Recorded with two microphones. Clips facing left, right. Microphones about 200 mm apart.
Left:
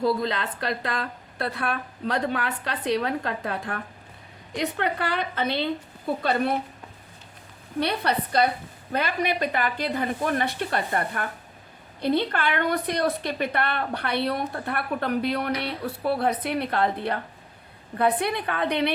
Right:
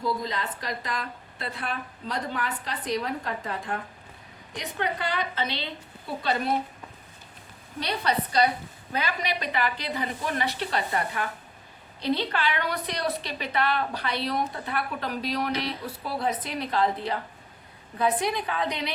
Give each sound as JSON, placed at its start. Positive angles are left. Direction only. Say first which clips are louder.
{"t": 0.0, "sound": "a woman's voice", "louder": "left 5 dB", "side_deg": 65}
{"t": 7.8, "sound": "a woman's voice", "louder": "left 3 dB", "side_deg": 60}